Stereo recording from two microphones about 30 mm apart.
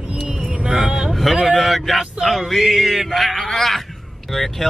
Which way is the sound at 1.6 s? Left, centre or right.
Centre.